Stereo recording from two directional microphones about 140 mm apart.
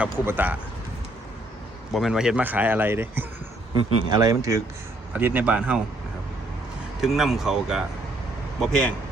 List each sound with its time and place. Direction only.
0.0 s speech: 10° right (ahead or behind)
1.9 s speech: centre (ahead or behind)
4.1 s speech: 25° right (ahead or behind)
5.1 s speech: 10° right (ahead or behind)
7.0 s speech: centre (ahead or behind)